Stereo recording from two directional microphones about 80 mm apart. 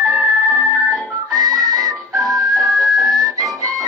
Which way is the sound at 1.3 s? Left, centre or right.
Right.